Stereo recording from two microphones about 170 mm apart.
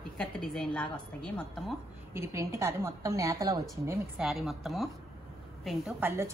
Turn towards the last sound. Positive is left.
turn(degrees=-10)  # may be behind; listen again after turning